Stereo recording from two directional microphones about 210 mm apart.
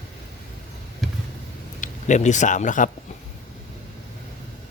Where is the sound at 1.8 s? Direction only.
35° left (ahead or behind).